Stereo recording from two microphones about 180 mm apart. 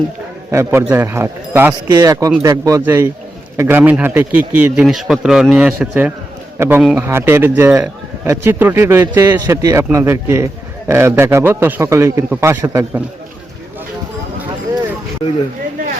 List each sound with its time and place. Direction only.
0.5 s a man's voice: 15° right (ahead or behind)